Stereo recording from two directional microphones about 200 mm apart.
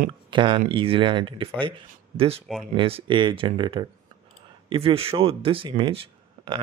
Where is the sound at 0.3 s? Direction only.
25° right (ahead or behind).